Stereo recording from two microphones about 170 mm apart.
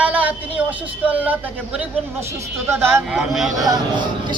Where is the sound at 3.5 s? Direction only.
25° right (ahead or behind).